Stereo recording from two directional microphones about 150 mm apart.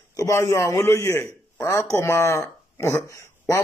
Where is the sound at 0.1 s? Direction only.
20° left (ahead or behind).